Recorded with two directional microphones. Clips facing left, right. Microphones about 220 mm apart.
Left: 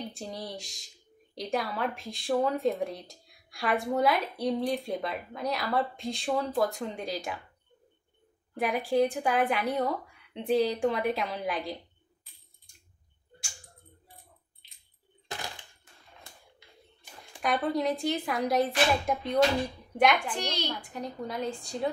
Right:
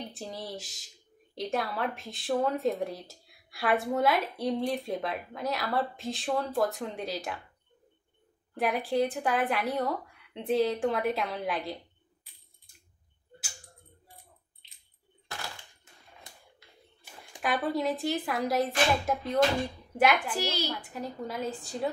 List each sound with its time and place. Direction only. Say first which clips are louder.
0.1 s speech: even; centre (ahead or behind)
8.5 s speech: left 2 dB; centre (ahead or behind)
15.2 s a sound: left 2 dB; 15° left (ahead or behind)
17.4 s speech: left 1 dB; centre (ahead or behind)